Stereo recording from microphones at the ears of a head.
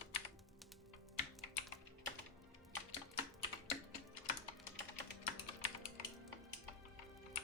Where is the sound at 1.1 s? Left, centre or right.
Left.